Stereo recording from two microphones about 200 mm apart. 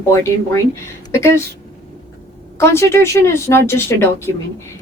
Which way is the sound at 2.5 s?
15° left (ahead or behind).